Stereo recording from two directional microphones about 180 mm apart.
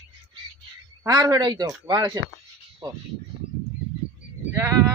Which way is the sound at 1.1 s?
20° right (ahead or behind).